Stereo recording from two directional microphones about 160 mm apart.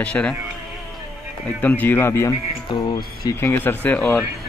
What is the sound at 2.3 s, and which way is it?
Speech, 30° left (ahead or behind).